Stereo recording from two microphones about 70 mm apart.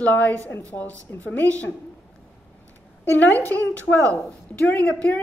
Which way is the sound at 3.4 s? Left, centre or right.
Left.